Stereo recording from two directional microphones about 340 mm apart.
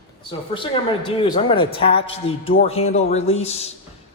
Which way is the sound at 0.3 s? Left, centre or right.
Centre.